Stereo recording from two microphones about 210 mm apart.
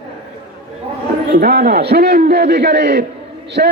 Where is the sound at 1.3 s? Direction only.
50° right (ahead or behind).